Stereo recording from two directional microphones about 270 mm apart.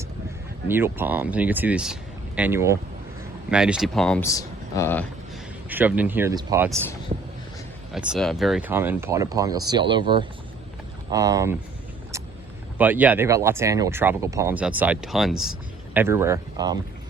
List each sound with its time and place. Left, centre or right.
0.7 s speech: centre
5.6 s speech: centre
7.1 s a sound: right
7.9 s speech: centre
12.8 s speech: centre